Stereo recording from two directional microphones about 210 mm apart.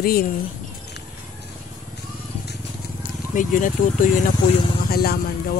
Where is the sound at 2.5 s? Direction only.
40° left (ahead or behind).